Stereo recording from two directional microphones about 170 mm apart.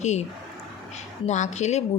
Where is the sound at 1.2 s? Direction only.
45° left (ahead or behind).